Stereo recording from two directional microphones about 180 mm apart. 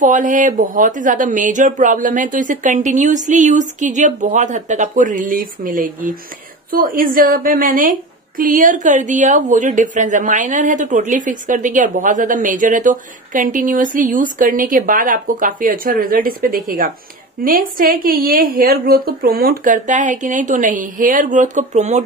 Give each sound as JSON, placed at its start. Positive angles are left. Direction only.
{"t": 0.0, "sound": "a woman's voice", "side_deg": -45}